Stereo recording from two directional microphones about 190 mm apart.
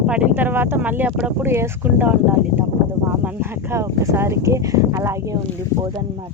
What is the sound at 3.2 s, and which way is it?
Speech, 10° right (ahead or behind).